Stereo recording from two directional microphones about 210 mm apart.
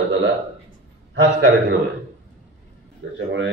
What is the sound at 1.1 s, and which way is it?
Speech, 55° right (ahead or behind).